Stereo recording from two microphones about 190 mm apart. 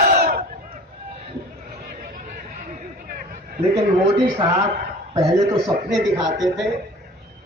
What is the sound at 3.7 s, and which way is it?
Speech, 25° right (ahead or behind).